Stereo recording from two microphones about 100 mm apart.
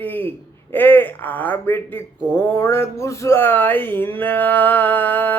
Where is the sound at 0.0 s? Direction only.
20° left (ahead or behind).